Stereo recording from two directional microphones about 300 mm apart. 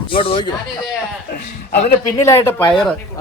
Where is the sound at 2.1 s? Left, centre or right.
Centre.